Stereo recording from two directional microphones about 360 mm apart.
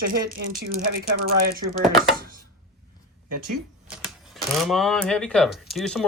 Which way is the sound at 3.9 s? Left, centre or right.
Centre.